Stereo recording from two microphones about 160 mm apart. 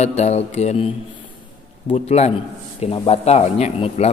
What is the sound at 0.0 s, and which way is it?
Mantra, 45° left (ahead or behind).